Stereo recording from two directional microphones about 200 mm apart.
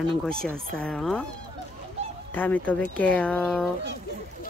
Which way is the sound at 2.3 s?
10° left (ahead or behind).